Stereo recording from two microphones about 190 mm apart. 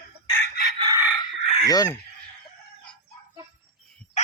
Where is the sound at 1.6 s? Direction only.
20° left (ahead or behind).